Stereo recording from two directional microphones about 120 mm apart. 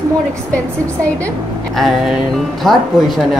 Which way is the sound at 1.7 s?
Centre (ahead or behind).